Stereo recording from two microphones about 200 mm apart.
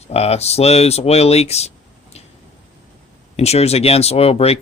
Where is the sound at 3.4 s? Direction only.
30° left (ahead or behind).